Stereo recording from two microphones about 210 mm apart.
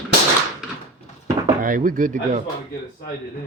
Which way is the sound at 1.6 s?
40° right (ahead or behind).